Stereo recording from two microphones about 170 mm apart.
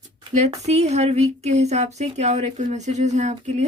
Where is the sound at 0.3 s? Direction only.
40° right (ahead or behind).